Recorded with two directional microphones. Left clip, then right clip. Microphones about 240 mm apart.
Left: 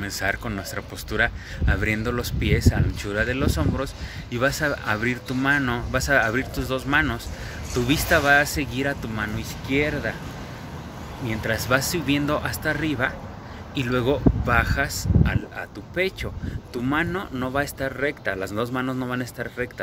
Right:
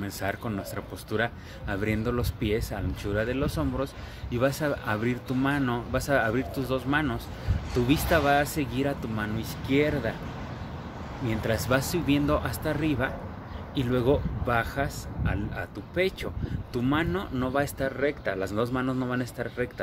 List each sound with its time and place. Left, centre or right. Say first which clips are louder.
0.0 s speech: left 6 dB; centre
11.2 s speech: left 3 dB; centre